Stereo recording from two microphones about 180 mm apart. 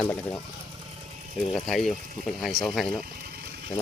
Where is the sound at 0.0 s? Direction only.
10° left (ahead or behind).